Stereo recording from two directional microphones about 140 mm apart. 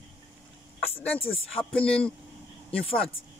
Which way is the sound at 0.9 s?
10° left (ahead or behind).